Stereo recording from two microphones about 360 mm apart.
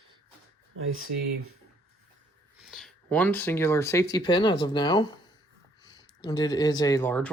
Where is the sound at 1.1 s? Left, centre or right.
Right.